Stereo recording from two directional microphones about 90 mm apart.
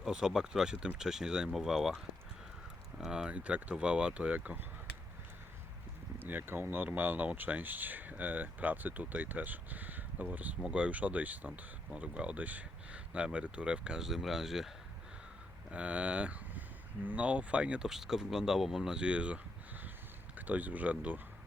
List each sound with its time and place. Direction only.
0.0 s speech: 5° right (ahead or behind)
3.0 s speech: 10° right (ahead or behind)
6.1 s speech: 20° right (ahead or behind); by 14.7 s 5° right (ahead or behind)
15.7 s speech: 15° right (ahead or behind)
20.5 s speech: 15° right (ahead or behind)